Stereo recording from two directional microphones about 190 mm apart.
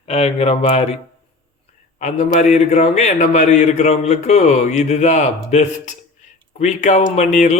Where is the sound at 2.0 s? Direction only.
40° left (ahead or behind).